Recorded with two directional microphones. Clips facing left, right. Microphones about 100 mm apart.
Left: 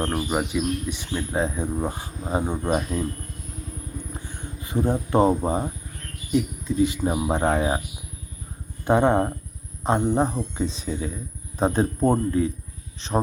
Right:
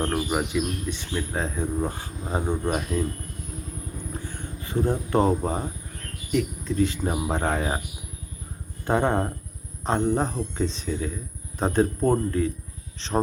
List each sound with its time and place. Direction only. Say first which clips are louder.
0.0 s speech: left 1 dB; 5° left (ahead or behind)
4.2 s speech: right 1 dB; 15° left (ahead or behind)
8.8 s speech: left 4 dB; 15° left (ahead or behind)